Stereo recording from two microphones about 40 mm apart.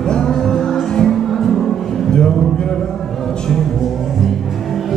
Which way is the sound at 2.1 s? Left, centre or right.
Centre.